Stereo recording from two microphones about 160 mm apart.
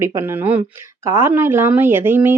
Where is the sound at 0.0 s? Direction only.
15° right (ahead or behind).